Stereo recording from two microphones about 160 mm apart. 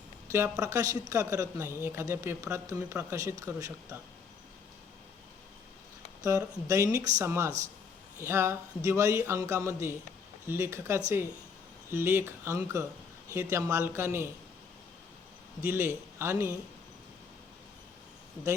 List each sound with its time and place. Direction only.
0.3 s a man's voice: 15° right (ahead or behind)
6.2 s a man's voice: 20° right (ahead or behind)
15.6 s a man's voice: 15° right (ahead or behind)